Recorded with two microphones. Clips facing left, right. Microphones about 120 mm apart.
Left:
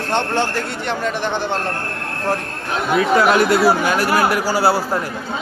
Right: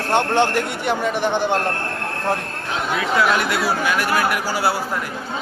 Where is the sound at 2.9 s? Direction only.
45° left (ahead or behind).